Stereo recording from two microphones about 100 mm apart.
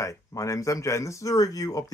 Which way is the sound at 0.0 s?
35° left (ahead or behind).